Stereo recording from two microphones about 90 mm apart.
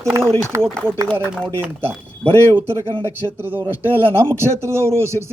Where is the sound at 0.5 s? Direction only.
35° right (ahead or behind).